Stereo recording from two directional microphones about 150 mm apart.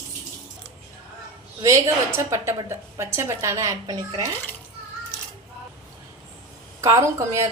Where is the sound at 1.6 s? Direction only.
20° right (ahead or behind).